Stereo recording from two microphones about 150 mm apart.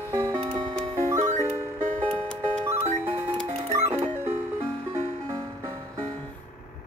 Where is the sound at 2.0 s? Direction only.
5° left (ahead or behind).